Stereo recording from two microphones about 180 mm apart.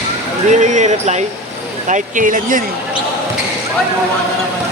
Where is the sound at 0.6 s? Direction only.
40° right (ahead or behind).